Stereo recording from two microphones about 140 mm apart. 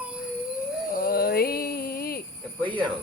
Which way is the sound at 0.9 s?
90° left.